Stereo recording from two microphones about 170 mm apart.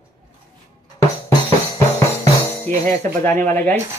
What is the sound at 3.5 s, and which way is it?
Speech, 10° left (ahead or behind).